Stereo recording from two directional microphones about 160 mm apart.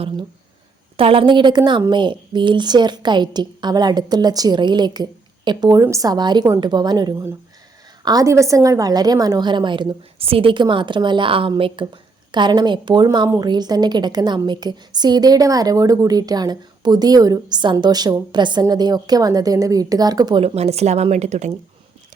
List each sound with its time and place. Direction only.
0.9 s a woman's voice: 35° right (ahead or behind)
20.4 s speech: 40° right (ahead or behind)